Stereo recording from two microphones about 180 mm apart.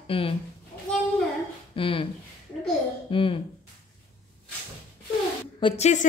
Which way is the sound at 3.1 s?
30° left (ahead or behind).